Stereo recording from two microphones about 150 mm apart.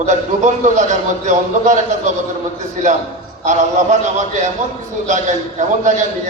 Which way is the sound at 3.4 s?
55° right (ahead or behind).